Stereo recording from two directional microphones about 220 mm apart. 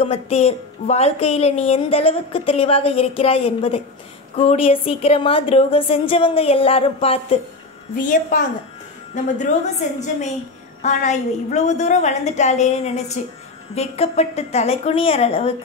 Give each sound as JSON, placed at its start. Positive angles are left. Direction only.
{"t": 0.0, "sound": "a woman's voice", "side_deg": 25}